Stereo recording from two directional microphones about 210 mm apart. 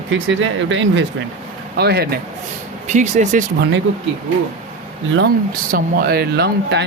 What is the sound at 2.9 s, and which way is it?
Speech, 35° right (ahead or behind).